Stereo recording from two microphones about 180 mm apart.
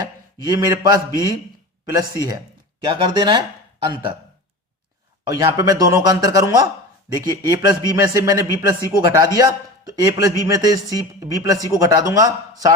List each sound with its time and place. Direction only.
0.4 s a man's voice: 20° right (ahead or behind)
2.8 s a man's voice: 25° right (ahead or behind)
5.4 s a man's voice: 20° right (ahead or behind)